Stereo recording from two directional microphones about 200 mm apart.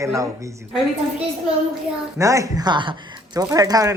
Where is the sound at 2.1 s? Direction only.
15° right (ahead or behind).